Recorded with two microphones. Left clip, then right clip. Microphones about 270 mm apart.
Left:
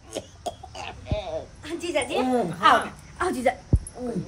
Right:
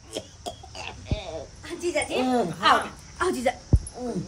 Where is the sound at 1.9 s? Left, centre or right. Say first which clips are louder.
Even; centre.